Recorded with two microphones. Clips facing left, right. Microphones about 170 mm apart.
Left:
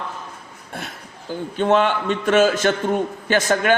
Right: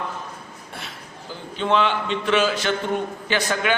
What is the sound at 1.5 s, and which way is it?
A man's voice, 50° left (ahead or behind).